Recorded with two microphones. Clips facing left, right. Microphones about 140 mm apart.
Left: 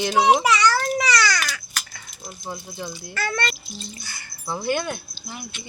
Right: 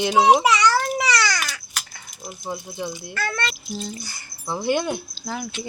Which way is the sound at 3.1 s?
Centre (ahead or behind).